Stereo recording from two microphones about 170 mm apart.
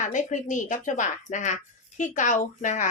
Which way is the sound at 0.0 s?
45° left (ahead or behind).